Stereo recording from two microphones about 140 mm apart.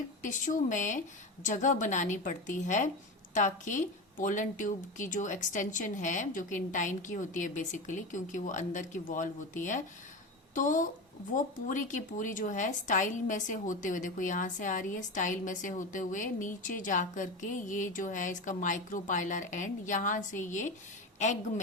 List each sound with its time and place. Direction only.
0.2 s a woman's voice: 65° left (ahead or behind)